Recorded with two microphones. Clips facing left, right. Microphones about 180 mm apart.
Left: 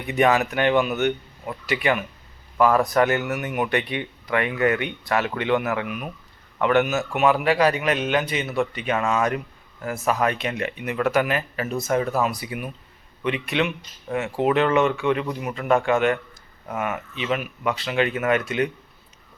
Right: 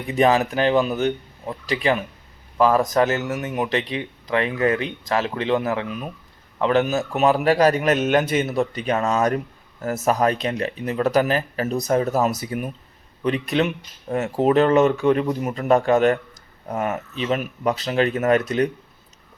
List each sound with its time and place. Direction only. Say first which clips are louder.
0.1 s speech: right 2 dB; 30° right (ahead or behind)
16.9 s speech: right 2 dB; 40° right (ahead or behind)